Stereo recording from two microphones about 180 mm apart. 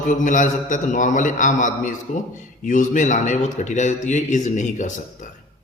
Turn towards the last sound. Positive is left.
turn(degrees=45)  # may be behind; listen again after turning